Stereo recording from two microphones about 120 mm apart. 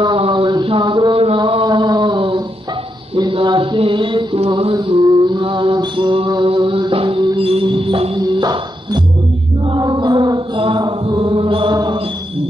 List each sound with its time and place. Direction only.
0.0 s a sound: 40° right (ahead or behind)
1.3 s mantra: 40° right (ahead or behind)
8.2 s music: 35° right (ahead or behind)
9.7 s mantra: 35° right (ahead or behind)